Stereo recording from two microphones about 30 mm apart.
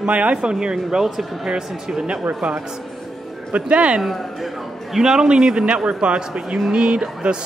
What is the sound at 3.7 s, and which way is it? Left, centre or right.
Speech, right.